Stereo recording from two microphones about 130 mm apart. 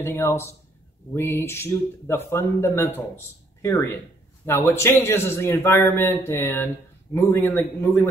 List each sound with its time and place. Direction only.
0.0 s a man's voice: 15° left (ahead or behind)